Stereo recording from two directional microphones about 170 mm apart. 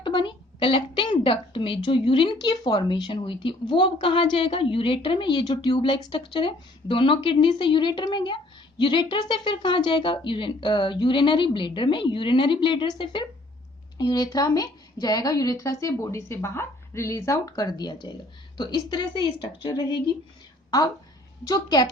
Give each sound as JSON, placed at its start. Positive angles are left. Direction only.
{"t": 0.0, "sound": "a woman's voice", "side_deg": 30}